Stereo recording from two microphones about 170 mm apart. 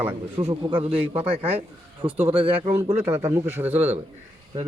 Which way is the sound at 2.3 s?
35° right (ahead or behind).